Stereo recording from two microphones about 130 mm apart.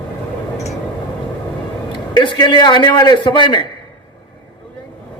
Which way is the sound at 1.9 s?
40° left (ahead or behind).